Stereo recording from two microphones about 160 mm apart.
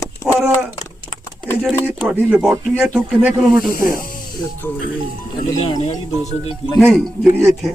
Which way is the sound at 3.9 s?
60° left (ahead or behind).